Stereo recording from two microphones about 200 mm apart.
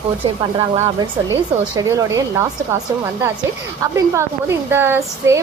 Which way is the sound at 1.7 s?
15° right (ahead or behind).